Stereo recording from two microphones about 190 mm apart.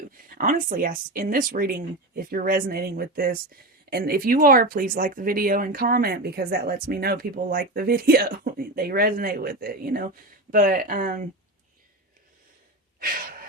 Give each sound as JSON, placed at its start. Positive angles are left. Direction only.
{"t": 0.3, "sound": "speech", "side_deg": -45}